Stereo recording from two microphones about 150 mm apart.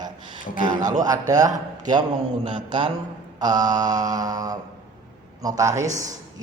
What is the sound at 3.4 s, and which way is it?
Speech, 25° right (ahead or behind).